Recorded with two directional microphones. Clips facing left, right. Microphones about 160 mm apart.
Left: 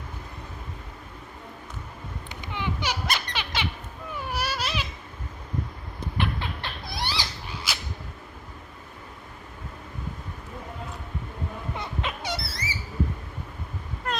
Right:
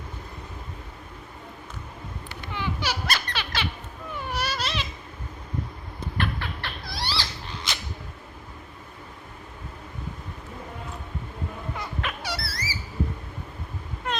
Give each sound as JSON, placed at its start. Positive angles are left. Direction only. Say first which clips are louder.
{"t": 2.3, "sound": "squeak", "louder": "even", "side_deg": 15}
{"t": 4.3, "sound": "baby cry", "louder": "even", "side_deg": 10}
{"t": 6.1, "sound": "rodents", "louder": "left 1 dB", "side_deg": 20}
{"t": 11.8, "sound": "squeak", "louder": "left 1 dB", "side_deg": 20}
{"t": 14.0, "sound": "a sound", "louder": "even", "side_deg": 0}